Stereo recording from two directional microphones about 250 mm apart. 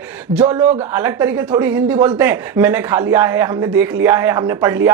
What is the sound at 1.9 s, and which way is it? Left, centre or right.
Speech, centre.